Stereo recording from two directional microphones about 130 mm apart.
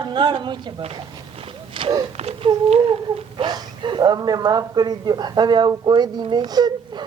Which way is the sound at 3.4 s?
35° right (ahead or behind).